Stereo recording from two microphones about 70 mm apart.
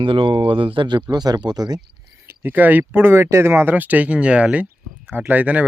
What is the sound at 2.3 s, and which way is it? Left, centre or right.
Speech, right.